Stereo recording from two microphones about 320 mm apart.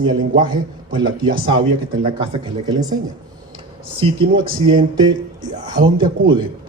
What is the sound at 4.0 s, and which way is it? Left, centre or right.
Speech, centre.